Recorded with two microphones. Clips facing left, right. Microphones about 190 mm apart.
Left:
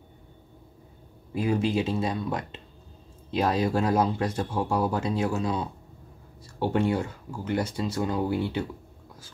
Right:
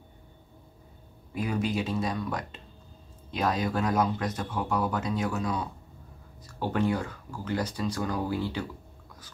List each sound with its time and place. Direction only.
1.3 s speech: 30° left (ahead or behind)